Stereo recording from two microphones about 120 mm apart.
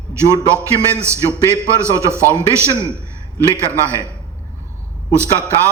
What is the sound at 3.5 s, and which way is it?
Speech, 25° right (ahead or behind).